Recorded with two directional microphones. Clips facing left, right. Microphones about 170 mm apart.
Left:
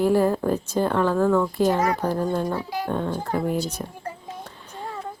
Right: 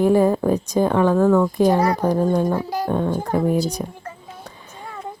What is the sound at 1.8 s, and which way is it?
Speech, 35° right (ahead or behind).